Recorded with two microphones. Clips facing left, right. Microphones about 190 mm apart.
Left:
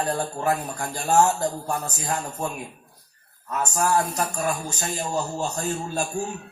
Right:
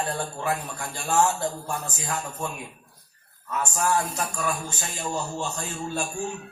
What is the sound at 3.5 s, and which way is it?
Speech, 40° left (ahead or behind).